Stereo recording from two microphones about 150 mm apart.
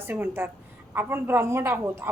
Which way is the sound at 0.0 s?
15° right (ahead or behind).